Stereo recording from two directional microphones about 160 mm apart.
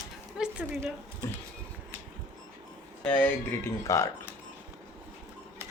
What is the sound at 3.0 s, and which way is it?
Speech, 10° left (ahead or behind).